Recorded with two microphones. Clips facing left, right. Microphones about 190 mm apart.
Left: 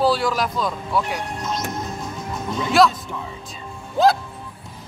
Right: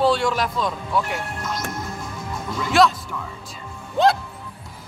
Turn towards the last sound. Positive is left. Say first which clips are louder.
# left 1 dB
turn(degrees=0)  # may be behind; listen again after turning